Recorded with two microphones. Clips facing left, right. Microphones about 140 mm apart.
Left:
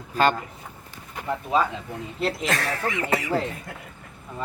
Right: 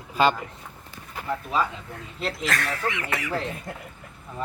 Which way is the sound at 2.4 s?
30° left (ahead or behind).